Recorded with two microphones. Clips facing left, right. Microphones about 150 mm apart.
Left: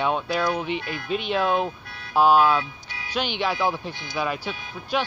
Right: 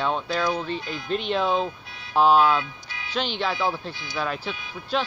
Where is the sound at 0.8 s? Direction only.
60° left (ahead or behind).